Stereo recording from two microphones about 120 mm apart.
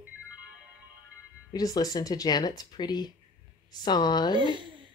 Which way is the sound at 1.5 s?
30° left (ahead or behind).